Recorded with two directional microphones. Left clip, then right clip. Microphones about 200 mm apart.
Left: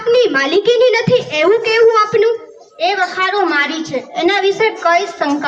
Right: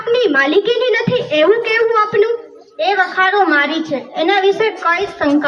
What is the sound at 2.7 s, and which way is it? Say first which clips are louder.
A woman's voice: right 1 dB; 35° left (ahead or behind).